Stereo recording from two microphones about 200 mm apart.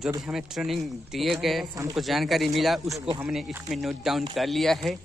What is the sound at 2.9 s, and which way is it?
Speech, 15° right (ahead or behind).